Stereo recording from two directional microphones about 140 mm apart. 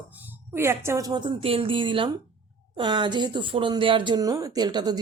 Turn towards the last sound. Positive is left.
turn(degrees=-30)  # may be behind; listen again after turning